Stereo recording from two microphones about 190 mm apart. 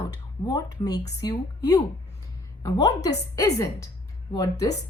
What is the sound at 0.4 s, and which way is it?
Speech, 20° left (ahead or behind).